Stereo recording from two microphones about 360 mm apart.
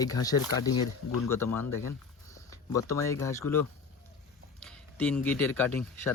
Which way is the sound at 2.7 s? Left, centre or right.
Centre.